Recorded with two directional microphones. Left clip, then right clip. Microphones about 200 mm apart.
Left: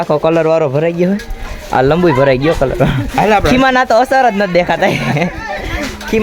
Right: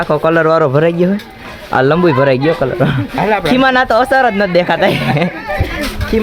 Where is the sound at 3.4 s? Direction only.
5° left (ahead or behind).